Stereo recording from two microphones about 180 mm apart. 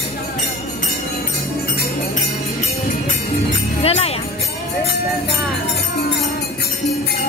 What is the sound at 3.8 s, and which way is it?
Music, 35° left (ahead or behind).